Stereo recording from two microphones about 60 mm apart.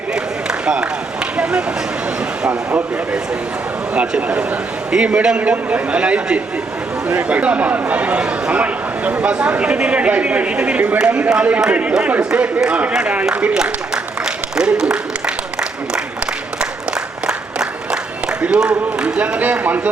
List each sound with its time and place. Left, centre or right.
0.1 s a sound: centre
2.5 s a man's voice: right
3.9 s a man's voice: centre
17.2 s applause: centre
19.0 s a man's voice: centre